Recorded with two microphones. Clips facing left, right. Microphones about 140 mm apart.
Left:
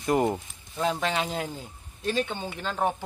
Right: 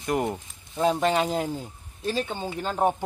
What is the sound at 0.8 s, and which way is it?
Speech, 10° right (ahead or behind).